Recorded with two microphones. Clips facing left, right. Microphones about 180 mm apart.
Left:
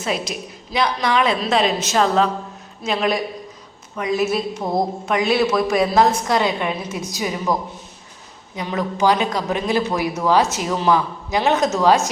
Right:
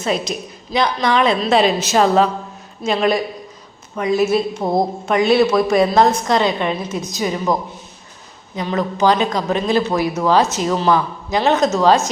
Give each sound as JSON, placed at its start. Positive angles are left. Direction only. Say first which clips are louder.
{"t": 0.0, "sound": "a woman's voice", "louder": "right 3 dB", "side_deg": 5}
{"t": 4.6, "sound": "a woman's voice", "louder": "right 1 dB", "side_deg": -25}
{"t": 5.0, "sound": "speech", "louder": "right 5 dB", "side_deg": 0}
{"t": 8.5, "sound": "speech", "louder": "right 3 dB", "side_deg": 10}